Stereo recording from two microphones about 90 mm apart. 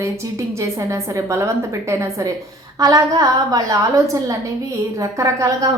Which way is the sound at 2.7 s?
45° right (ahead or behind).